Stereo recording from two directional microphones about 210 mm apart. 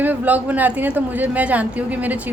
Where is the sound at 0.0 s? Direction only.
10° right (ahead or behind).